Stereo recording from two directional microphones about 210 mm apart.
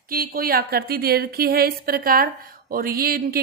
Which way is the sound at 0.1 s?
45° right (ahead or behind).